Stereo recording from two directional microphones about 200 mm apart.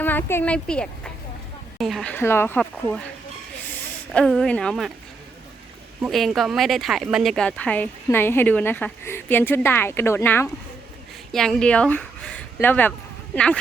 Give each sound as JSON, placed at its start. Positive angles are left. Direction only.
{"t": 0.0, "sound": "speech", "side_deg": 10}
{"t": 4.1, "sound": "speech", "side_deg": 5}
{"t": 6.0, "sound": "speech", "side_deg": 0}
{"t": 11.3, "sound": "speech", "side_deg": 0}